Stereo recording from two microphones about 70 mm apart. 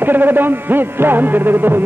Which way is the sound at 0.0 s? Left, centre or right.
Right.